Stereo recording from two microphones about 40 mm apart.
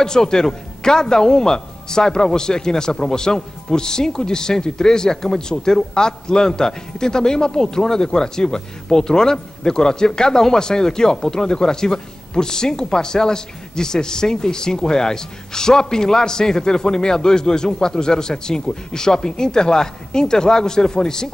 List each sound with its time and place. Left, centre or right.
0.0 s a man's voice: centre